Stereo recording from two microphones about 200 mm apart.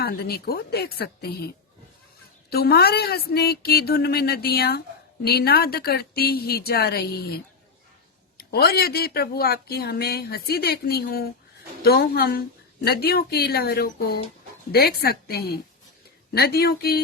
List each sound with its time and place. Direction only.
0.0 s speech: 50° left (ahead or behind)
2.5 s speech: 50° left (ahead or behind)
8.4 s speech: 50° left (ahead or behind)